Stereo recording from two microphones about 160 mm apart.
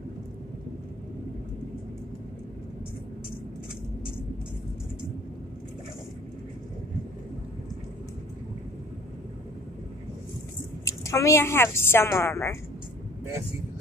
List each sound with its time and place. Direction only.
10.9 s a woman's voice: 20° left (ahead or behind)